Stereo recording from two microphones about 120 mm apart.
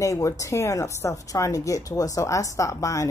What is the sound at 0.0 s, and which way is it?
A woman's voice, 25° left (ahead or behind).